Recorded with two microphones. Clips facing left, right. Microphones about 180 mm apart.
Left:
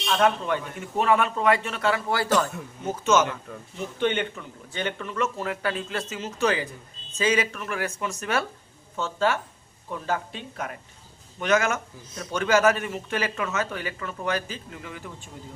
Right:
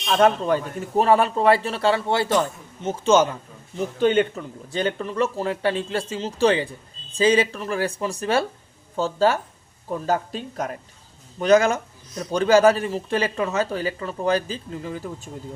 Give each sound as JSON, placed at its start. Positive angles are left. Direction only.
{"t": 0.1, "sound": "speech", "side_deg": -35}